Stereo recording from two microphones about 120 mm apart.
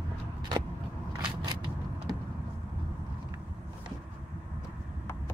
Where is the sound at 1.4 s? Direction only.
40° right (ahead or behind).